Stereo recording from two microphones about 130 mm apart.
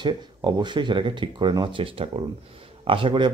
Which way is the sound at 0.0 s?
35° right (ahead or behind).